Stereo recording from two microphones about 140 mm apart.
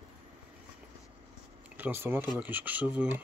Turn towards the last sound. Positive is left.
turn(degrees=-10)  # may be behind; listen again after turning